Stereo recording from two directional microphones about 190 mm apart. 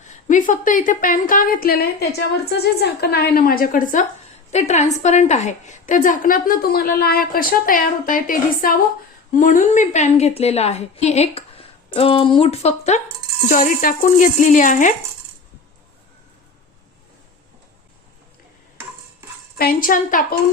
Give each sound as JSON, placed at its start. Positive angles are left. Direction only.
{"t": 0.0, "sound": "a woman's voice", "side_deg": 45}
{"t": 13.5, "sound": "a woman's voice", "side_deg": 45}
{"t": 19.5, "sound": "a woman's voice", "side_deg": 50}